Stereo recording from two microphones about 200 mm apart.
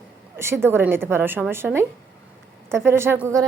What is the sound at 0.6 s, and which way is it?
A woman's voice, 10° right (ahead or behind).